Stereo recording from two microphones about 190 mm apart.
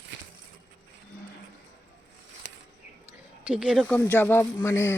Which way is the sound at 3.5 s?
5° right (ahead or behind).